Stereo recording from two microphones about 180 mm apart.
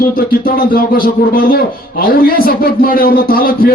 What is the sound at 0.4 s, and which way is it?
A man's voice, 55° left (ahead or behind).